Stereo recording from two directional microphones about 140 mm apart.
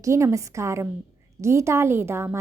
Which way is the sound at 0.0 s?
20° right (ahead or behind).